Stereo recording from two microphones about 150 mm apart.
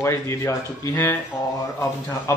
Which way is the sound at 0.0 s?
15° left (ahead or behind).